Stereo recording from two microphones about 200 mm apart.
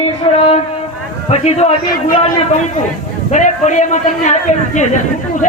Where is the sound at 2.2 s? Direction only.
35° left (ahead or behind).